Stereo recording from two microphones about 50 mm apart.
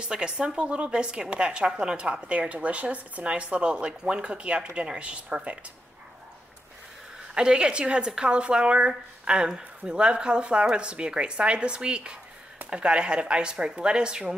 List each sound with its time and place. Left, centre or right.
0.0 s a woman's voice: centre
7.3 s a woman's voice: centre